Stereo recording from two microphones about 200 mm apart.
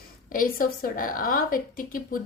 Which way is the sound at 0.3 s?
45° left (ahead or behind).